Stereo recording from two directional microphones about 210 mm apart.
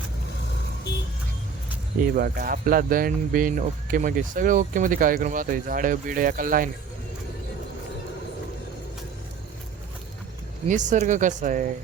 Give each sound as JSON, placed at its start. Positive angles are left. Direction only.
{"t": 2.1, "sound": "speech", "side_deg": -45}
{"t": 10.7, "sound": "speech", "side_deg": -35}